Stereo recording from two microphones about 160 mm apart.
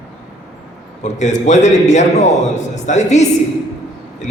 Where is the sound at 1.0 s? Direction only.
45° left (ahead or behind).